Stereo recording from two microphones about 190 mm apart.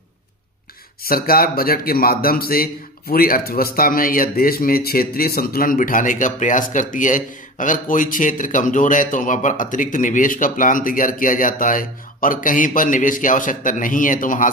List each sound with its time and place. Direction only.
1.0 s a man's voice: 50° left (ahead or behind)